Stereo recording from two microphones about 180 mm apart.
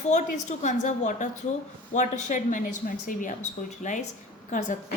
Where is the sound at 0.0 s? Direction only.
40° left (ahead or behind).